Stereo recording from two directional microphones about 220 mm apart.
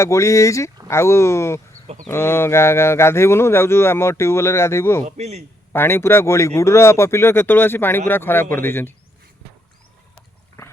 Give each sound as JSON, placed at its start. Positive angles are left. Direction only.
{"t": 0.0, "sound": "speech", "side_deg": 15}
{"t": 5.0, "sound": "a man's voice", "side_deg": -30}
{"t": 5.7, "sound": "speech", "side_deg": 10}